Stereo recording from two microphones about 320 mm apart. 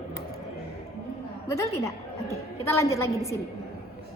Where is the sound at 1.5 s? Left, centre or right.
Centre.